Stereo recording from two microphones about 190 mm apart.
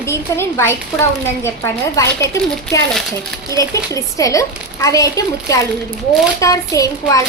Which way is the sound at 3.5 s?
15° left (ahead or behind).